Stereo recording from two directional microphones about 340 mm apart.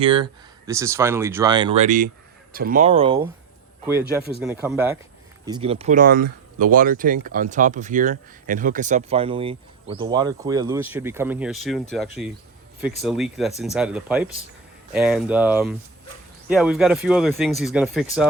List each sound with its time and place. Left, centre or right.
0.0 s speech: centre
4.4 s speech: centre